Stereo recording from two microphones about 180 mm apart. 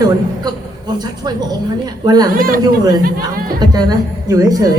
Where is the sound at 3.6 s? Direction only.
20° right (ahead or behind).